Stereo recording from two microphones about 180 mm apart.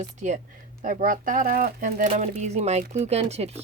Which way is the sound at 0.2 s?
40° right (ahead or behind).